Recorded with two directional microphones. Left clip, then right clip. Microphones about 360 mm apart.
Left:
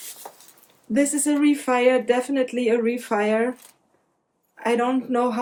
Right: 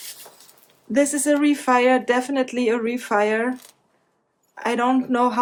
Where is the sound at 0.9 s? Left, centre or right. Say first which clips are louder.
Right 3 dB; centre.